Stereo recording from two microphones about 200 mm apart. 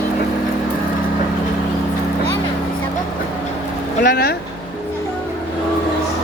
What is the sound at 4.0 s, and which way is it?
Speech, 50° left (ahead or behind).